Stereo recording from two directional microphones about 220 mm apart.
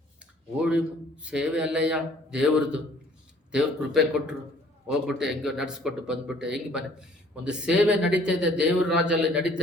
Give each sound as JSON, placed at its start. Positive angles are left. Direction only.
{"t": 0.6, "sound": "a man's voice", "side_deg": -5}